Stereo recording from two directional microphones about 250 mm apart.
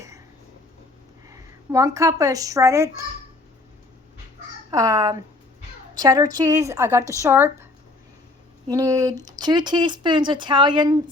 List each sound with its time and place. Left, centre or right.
1.3 s speech: centre
4.7 s speech: centre
8.7 s speech: centre